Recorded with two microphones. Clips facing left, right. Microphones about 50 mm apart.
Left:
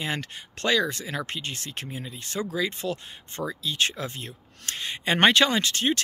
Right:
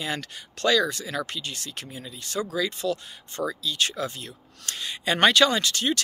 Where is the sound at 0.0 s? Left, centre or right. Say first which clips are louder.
Even; left.